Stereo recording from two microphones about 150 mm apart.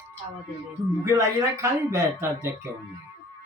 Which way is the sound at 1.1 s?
20° right (ahead or behind).